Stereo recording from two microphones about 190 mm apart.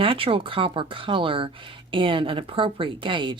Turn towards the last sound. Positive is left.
turn(degrees=-25)  # may be behind; listen again after turning